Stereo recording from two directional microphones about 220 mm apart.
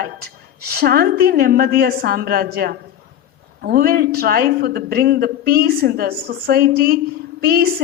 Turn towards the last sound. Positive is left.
turn(degrees=-45)  # may be behind; listen again after turning